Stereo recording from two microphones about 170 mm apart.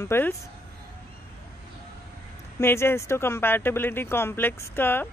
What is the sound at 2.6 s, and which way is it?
Speech, 15° left (ahead or behind).